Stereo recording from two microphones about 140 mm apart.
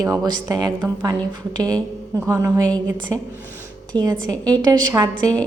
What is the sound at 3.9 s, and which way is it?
Speech, 30° right (ahead or behind).